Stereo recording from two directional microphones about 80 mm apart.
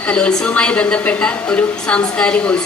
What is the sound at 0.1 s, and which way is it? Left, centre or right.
A woman's voice, centre.